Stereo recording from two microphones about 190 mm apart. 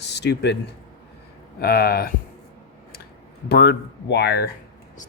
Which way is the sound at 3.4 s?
60° left (ahead or behind).